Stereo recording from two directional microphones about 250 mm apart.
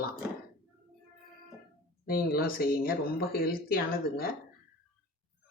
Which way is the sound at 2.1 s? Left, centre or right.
Left.